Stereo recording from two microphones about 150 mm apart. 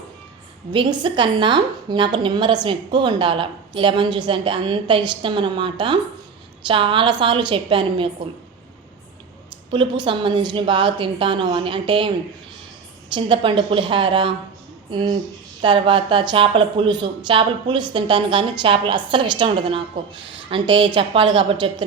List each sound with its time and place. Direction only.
0.7 s a woman's voice: 30° right (ahead or behind)
9.7 s a woman's voice: 30° right (ahead or behind)
13.1 s a woman's voice: 35° right (ahead or behind)